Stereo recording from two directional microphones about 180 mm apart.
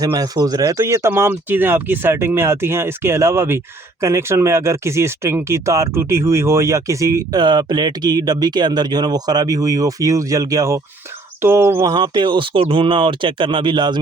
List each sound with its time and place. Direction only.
0.0 s speech: 20° right (ahead or behind)